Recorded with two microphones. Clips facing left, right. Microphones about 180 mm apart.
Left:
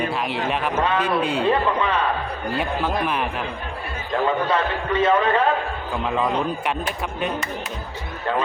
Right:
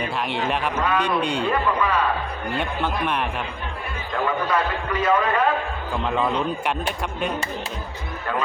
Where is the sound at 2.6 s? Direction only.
Centre (ahead or behind).